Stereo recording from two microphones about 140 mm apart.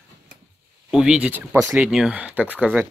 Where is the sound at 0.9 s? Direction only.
5° right (ahead or behind).